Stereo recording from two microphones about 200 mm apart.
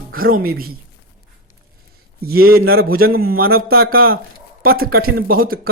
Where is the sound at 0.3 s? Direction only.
45° right (ahead or behind).